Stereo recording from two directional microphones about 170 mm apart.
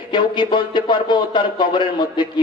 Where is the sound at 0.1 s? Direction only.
25° left (ahead or behind).